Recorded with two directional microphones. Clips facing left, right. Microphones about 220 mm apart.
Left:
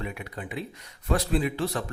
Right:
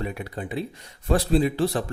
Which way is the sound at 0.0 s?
35° right (ahead or behind).